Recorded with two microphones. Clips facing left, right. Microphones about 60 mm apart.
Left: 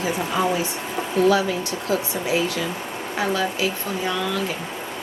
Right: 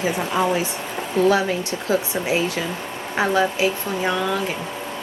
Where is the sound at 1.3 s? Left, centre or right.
Right.